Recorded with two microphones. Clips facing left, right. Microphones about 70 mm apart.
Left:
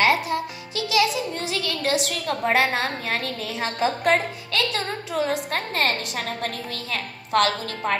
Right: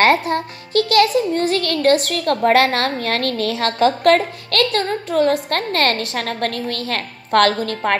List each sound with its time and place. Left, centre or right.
0.0 s a child's voice: right